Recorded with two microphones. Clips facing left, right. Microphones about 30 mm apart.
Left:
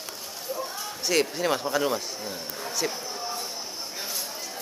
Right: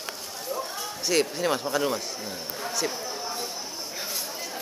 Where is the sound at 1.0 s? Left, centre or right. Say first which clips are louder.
Even; centre.